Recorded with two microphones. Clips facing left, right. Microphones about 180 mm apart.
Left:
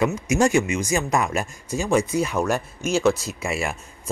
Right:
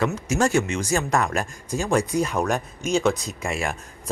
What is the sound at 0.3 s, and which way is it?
Speech, 10° left (ahead or behind).